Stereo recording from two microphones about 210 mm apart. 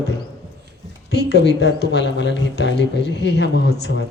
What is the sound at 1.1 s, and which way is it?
Speech, 55° left (ahead or behind).